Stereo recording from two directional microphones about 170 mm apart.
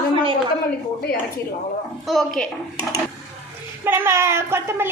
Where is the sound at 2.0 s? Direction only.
Centre (ahead or behind).